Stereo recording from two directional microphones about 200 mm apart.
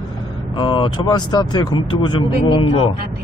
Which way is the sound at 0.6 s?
25° left (ahead or behind).